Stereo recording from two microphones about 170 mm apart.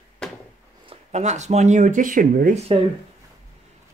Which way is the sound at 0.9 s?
40° right (ahead or behind).